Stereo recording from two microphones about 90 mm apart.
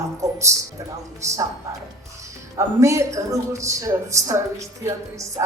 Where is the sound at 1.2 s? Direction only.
35° right (ahead or behind).